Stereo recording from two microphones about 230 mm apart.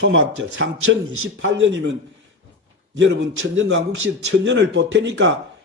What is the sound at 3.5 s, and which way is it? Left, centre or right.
Speech, right.